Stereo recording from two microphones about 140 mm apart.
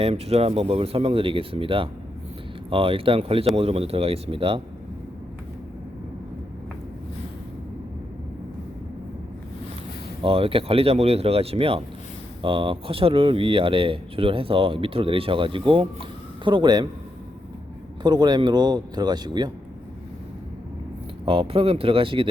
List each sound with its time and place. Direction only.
0.0 s speech: 45° right (ahead or behind)
10.2 s speech: 40° right (ahead or behind)
18.0 s speech: 30° right (ahead or behind)
21.2 s speech: 40° right (ahead or behind)